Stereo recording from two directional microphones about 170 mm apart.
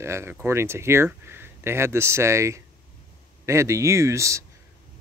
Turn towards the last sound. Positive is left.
turn(degrees=-15)  # may be behind; listen again after turning